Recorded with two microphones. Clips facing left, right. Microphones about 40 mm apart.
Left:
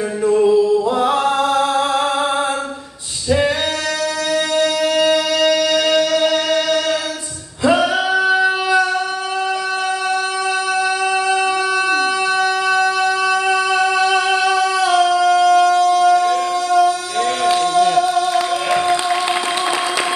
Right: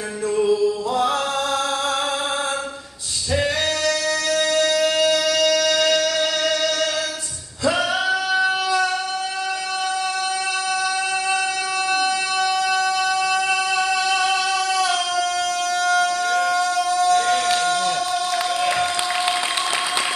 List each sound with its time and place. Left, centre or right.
0.3 s music: centre
0.7 s mantra: left
4.3 s music: centre
7.7 s singing: centre
11.9 s a sound: centre
14.9 s shofar: centre
16.3 s a sound: centre